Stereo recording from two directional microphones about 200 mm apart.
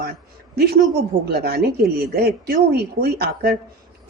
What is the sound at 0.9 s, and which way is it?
A woman's voice, 50° right (ahead or behind).